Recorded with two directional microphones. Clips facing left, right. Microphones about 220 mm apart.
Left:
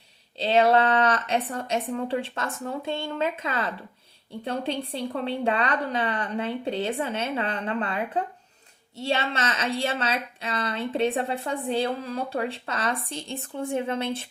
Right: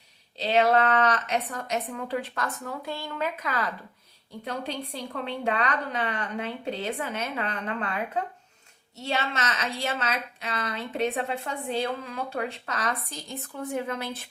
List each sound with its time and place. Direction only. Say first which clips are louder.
0.3 s a woman's voice: left 2 dB; 30° left (ahead or behind)